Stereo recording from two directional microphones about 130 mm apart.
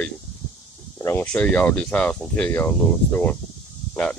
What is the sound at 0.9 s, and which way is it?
Speech, 20° left (ahead or behind).